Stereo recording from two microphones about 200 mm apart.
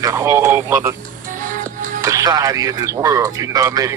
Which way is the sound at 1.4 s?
40° right (ahead or behind).